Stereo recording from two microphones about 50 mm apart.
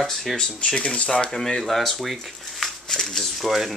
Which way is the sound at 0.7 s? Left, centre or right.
Left.